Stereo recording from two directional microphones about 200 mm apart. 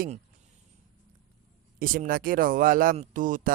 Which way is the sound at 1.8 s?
45° right (ahead or behind).